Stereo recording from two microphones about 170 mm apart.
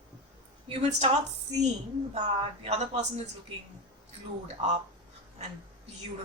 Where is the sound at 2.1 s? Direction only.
40° right (ahead or behind).